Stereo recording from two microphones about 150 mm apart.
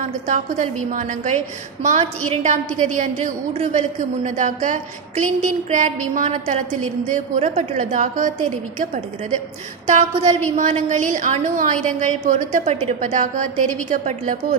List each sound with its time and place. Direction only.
0.0 s a woman's voice: 55° right (ahead or behind)